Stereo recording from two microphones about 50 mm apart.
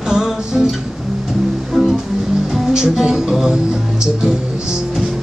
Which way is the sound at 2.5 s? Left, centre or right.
Centre.